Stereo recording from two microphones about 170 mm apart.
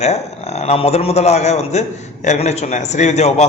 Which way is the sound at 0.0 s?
40° left (ahead or behind).